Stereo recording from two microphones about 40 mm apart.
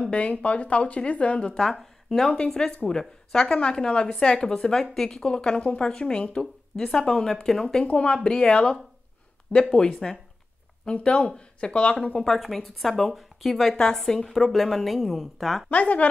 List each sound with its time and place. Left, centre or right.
0.0 s speech: left
1.5 s speech: centre
2.3 s speech: left
6.4 s speech: centre
7.8 s speech: left
10.9 s speech: left
12.4 s a woman's voice: centre
13.7 s a woman's voice: centre
15.7 s speech: left